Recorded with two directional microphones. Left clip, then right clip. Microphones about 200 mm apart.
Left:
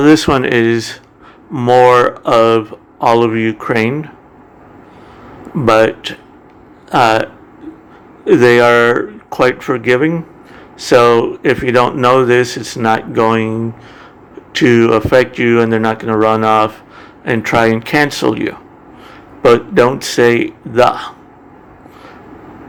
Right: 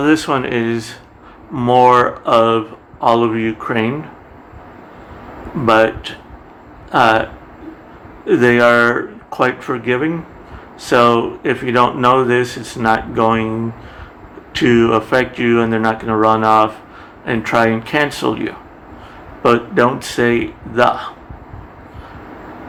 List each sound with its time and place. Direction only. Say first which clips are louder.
0.0 s speech: left 5 dB; 30° left (ahead or behind)
5.6 s speech: left 2 dB; 35° left (ahead or behind)